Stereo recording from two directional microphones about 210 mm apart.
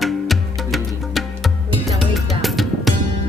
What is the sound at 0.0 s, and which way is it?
Music, centre (ahead or behind).